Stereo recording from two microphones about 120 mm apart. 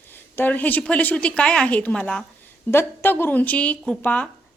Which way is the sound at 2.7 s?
20° left (ahead or behind).